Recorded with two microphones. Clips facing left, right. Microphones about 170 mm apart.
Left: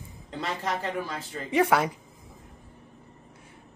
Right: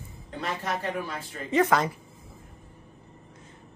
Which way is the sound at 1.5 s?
10° left (ahead or behind).